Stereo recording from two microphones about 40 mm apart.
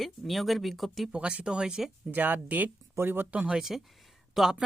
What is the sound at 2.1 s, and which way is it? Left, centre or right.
Speech, right.